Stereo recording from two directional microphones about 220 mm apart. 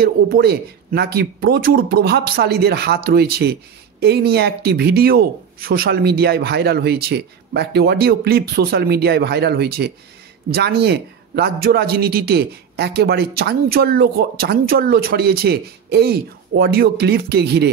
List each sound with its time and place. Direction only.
0.0 s a man's voice: 45° right (ahead or behind)